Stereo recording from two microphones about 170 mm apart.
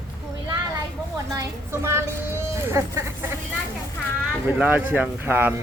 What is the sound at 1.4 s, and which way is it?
Vehicle, 15° right (ahead or behind).